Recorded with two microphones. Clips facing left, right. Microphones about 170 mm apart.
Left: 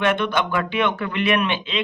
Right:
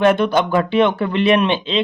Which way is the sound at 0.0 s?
35° right (ahead or behind).